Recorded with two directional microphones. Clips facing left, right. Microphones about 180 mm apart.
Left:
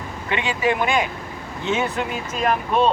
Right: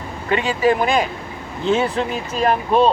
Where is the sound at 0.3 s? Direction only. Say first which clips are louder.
Right 5 dB; 40° right (ahead or behind).